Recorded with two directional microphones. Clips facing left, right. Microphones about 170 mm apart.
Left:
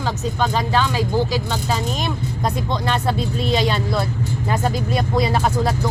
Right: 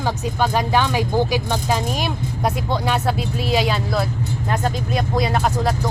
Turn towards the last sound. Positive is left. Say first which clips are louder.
# left 1 dB
turn(degrees=0)  # may be behind; listen again after turning